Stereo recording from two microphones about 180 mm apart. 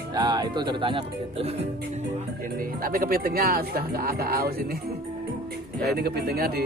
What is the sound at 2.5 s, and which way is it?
Speech, 50° right (ahead or behind).